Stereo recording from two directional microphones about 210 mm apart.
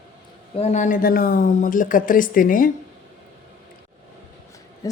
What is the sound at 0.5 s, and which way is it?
Speech, 30° left (ahead or behind).